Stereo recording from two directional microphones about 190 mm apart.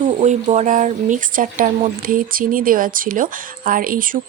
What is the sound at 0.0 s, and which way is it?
Speech, 40° right (ahead or behind).